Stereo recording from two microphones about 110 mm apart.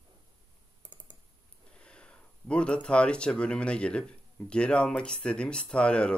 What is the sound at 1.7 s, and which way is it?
Speech, 10° left (ahead or behind).